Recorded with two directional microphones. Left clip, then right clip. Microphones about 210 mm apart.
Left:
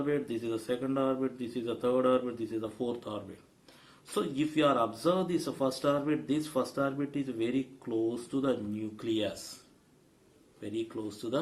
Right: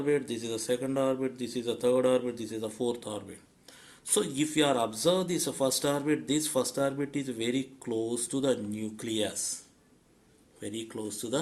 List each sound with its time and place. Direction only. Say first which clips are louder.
0.0 s speech: right 3 dB; 35° right (ahead or behind)
10.6 s speech: left 1 dB; 45° right (ahead or behind)